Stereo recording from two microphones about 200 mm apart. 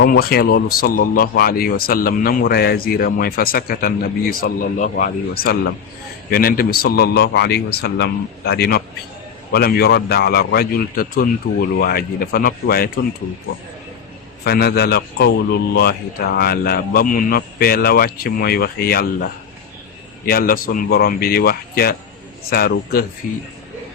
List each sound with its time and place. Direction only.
0.0 s speech: 50° left (ahead or behind)
14.4 s speech: 50° left (ahead or behind)